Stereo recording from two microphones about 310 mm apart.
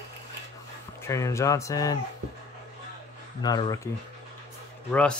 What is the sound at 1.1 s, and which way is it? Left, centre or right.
Speech, centre.